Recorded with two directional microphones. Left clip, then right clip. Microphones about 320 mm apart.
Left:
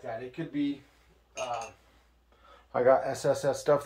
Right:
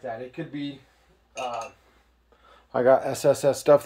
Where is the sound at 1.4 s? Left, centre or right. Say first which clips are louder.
Right 4 dB; right.